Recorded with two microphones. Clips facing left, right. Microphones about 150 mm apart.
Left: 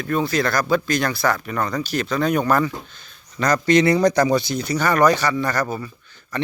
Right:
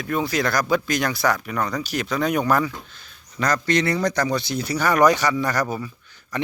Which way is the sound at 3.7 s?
15° left (ahead or behind).